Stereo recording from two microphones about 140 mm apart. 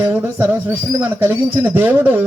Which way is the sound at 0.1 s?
10° right (ahead or behind).